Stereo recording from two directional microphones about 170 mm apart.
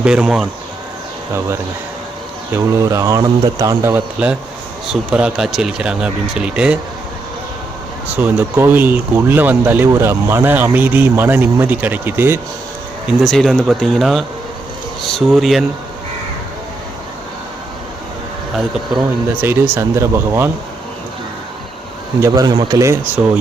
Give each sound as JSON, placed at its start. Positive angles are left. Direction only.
{"t": 0.0, "sound": "speech", "side_deg": -5}
{"t": 2.5, "sound": "speech", "side_deg": -15}
{"t": 8.0, "sound": "speech", "side_deg": -10}
{"t": 13.2, "sound": "speech", "side_deg": 0}
{"t": 19.4, "sound": "speech", "side_deg": -15}
{"t": 22.2, "sound": "speech", "side_deg": -20}